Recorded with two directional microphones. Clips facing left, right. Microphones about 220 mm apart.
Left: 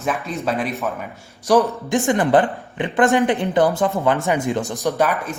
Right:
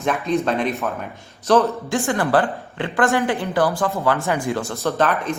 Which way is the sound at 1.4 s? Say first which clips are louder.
Even; 15° left (ahead or behind).